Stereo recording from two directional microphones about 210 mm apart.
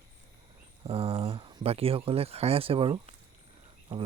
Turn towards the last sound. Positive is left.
turn(degrees=-25)  # may be behind; listen again after turning